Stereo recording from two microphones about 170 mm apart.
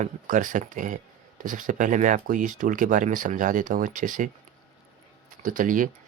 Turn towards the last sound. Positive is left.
turn(degrees=-50)  # may be behind; listen again after turning